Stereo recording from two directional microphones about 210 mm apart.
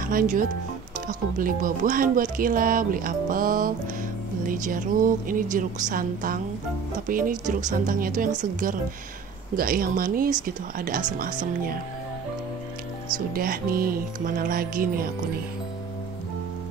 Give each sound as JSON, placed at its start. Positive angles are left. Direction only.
{"t": 0.0, "sound": "speech", "side_deg": -40}
{"t": 13.3, "sound": "speech", "side_deg": -45}